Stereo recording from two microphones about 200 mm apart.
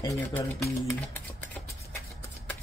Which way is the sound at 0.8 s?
10° left (ahead or behind).